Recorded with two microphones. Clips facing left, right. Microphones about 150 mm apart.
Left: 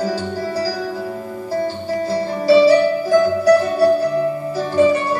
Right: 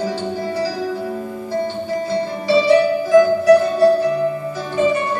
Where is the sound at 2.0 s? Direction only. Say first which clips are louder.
Left 5 dB; 35° left (ahead or behind).